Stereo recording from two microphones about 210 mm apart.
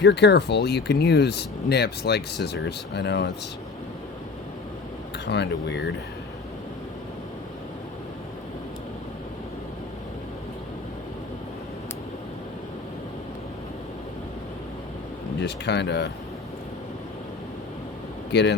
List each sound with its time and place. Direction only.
0.0 s speech: 50° left (ahead or behind)
5.1 s speech: 55° left (ahead or behind)
15.4 s speech: 55° left (ahead or behind)
18.3 s speech: 55° left (ahead or behind)